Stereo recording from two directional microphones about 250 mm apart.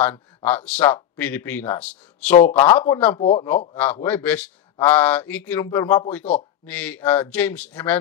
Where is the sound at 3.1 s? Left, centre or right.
Left.